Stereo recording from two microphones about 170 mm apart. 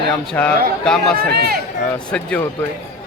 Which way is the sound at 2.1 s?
5° left (ahead or behind).